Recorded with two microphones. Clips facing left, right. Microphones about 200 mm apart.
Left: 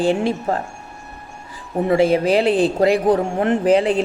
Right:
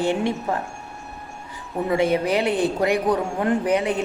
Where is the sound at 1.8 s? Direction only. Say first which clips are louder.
Left 5 dB; 30° left (ahead or behind).